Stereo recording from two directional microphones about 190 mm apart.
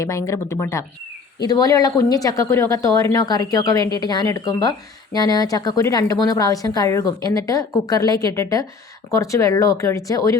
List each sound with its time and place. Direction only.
0.0 s a woman's voice: 15° left (ahead or behind)